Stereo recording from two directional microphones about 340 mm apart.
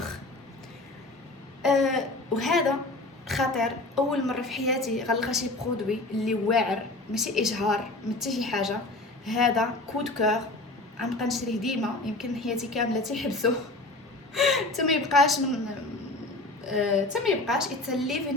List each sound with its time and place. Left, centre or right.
1.6 s a woman's voice: centre
16.7 s a woman's voice: centre